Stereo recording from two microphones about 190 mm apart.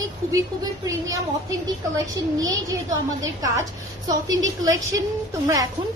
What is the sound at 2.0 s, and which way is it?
A woman's voice, 20° right (ahead or behind).